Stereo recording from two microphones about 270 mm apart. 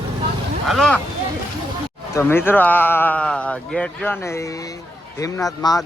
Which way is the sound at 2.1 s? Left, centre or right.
Centre.